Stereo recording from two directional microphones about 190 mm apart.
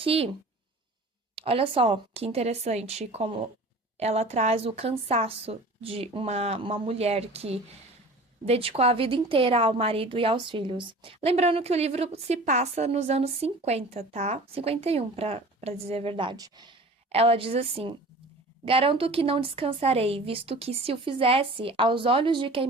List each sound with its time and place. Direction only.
0.0 s a woman's voice: 30° right (ahead or behind)
1.4 s a woman's voice: 30° right (ahead or behind)